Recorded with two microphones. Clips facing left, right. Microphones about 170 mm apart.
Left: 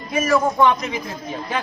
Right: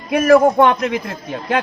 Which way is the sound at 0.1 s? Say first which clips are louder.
Right 8 dB; 60° right (ahead or behind).